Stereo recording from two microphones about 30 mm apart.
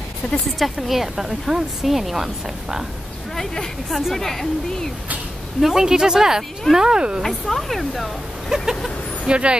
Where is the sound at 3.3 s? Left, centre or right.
Centre.